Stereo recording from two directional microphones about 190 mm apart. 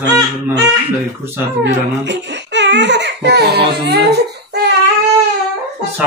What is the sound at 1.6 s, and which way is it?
Speech, 65° right (ahead or behind).